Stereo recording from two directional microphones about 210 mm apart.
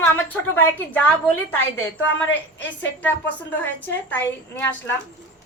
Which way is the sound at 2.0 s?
60° left (ahead or behind).